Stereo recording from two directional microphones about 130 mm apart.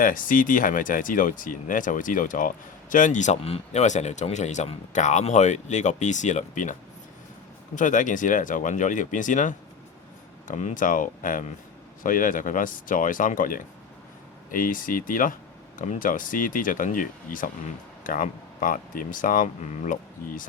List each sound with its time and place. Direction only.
0.0 s speech: 90° left; by 6.7 s 75° left (ahead or behind)
7.8 s speech: 80° left